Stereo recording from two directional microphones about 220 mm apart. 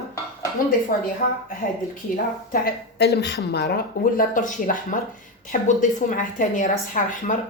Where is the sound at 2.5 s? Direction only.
40° left (ahead or behind).